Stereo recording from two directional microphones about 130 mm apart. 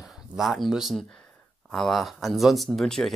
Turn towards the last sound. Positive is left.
turn(degrees=5)  # may be behind; listen again after turning